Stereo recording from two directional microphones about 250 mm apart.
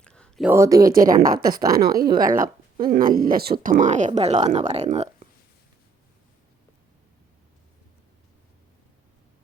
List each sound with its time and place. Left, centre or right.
0.0 s a sound: centre
0.5 s speech: centre
0.9 s a woman's voice: right